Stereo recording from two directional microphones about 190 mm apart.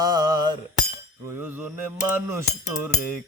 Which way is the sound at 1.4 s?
10° right (ahead or behind).